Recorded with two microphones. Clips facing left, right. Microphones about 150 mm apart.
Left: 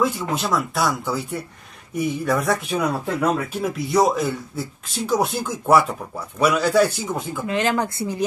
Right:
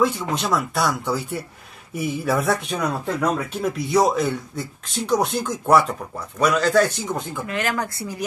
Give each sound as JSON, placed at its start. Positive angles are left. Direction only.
{"t": 0.0, "sound": "speech", "side_deg": 0}
{"t": 7.4, "sound": "speech", "side_deg": 20}